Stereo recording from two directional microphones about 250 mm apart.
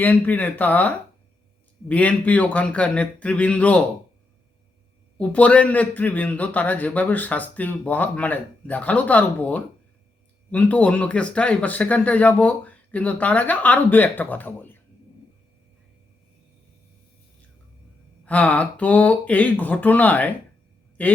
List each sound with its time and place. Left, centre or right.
0.0 s a man's voice: centre
5.1 s a man's voice: centre
18.3 s a man's voice: centre